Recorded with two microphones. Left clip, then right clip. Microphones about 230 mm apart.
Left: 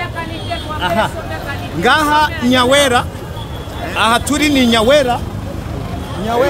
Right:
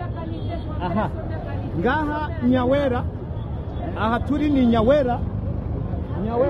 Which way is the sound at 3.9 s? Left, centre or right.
Left.